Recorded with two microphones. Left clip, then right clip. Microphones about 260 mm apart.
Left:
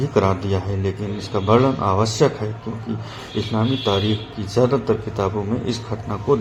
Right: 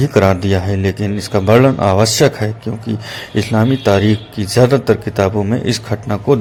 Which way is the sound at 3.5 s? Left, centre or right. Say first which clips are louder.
Right 7 dB; right.